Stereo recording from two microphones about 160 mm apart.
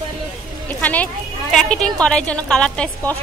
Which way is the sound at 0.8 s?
10° left (ahead or behind).